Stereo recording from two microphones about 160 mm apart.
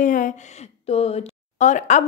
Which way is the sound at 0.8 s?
40° left (ahead or behind).